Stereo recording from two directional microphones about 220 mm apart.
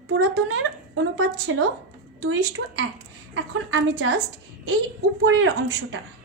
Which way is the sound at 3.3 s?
60° right (ahead or behind).